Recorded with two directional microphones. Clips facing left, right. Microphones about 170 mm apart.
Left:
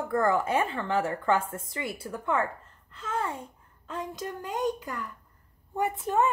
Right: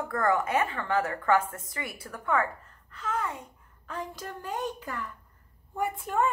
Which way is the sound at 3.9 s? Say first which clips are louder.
Left 2 dB; 20° left (ahead or behind).